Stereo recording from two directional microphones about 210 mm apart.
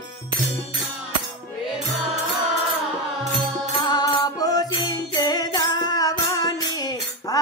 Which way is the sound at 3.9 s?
20° left (ahead or behind).